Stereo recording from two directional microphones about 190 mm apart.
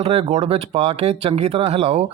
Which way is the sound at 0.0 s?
30° right (ahead or behind).